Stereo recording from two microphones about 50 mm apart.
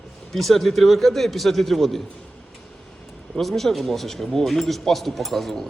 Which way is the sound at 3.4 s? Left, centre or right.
Centre.